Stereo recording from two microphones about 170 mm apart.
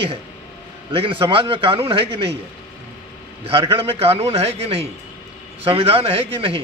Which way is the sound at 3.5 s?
35° right (ahead or behind).